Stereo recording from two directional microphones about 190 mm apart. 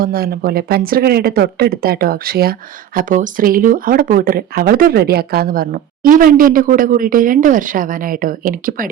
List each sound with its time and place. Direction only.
0.0 s speech: 50° right (ahead or behind)